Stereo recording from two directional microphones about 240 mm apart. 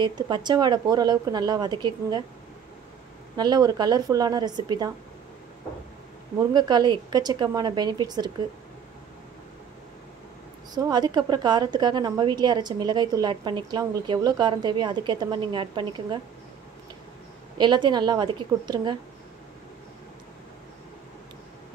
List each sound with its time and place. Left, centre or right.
0.0 s a woman's voice: centre
3.3 s a woman's voice: centre
6.3 s a woman's voice: centre
10.7 s a woman's voice: centre
17.6 s a woman's voice: centre